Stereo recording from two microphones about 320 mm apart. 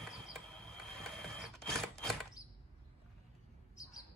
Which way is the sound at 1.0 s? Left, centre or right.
Centre.